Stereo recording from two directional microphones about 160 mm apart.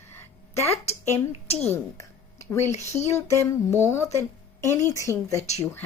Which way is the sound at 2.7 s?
15° left (ahead or behind).